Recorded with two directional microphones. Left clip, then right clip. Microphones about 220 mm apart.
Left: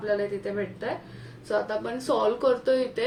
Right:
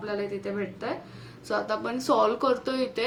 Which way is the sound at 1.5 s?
25° right (ahead or behind).